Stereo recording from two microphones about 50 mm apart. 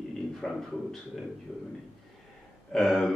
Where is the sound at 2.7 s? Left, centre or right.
Centre.